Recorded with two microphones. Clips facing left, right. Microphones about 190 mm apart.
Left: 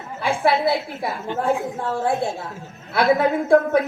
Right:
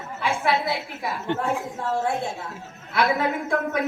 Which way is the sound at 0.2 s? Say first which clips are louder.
Left 4 dB; 30° left (ahead or behind).